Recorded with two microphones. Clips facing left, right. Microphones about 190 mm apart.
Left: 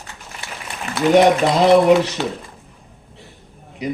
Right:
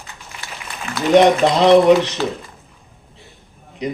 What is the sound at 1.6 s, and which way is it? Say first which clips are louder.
Speech: right 1 dB; 5° left (ahead or behind).